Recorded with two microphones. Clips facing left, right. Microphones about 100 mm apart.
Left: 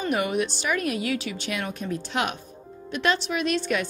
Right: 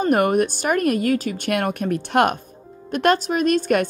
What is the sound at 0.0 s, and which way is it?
A woman's voice, 50° right (ahead or behind).